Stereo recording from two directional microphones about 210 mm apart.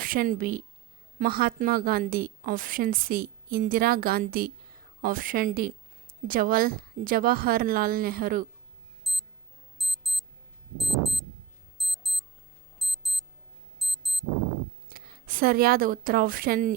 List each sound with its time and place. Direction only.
0.0 s a woman's voice: 40° right (ahead or behind)
9.1 s clock: centre (ahead or behind)
9.7 s alarm clock: centre (ahead or behind)
10.8 s clock: centre (ahead or behind)
11.8 s alarm clock: centre (ahead or behind)
13.7 s clock: centre (ahead or behind)
14.9 s speech: 45° right (ahead or behind)